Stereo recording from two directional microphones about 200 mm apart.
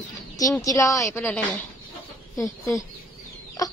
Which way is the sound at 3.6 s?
15° left (ahead or behind).